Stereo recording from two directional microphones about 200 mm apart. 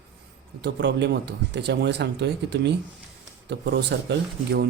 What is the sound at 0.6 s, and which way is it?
Speech, 60° right (ahead or behind).